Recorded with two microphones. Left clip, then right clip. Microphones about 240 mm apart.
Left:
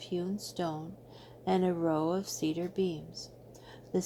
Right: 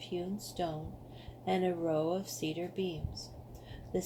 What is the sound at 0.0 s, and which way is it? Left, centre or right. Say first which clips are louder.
Speech: left 3 dB; left.